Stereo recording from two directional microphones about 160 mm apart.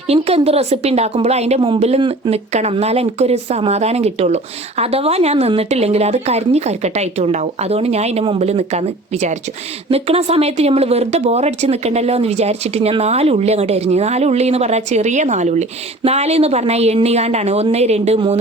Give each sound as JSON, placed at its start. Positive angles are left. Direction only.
{"t": 0.1, "sound": "speech", "side_deg": -40}